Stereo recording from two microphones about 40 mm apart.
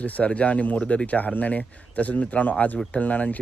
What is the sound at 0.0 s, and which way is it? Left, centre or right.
Speech, left.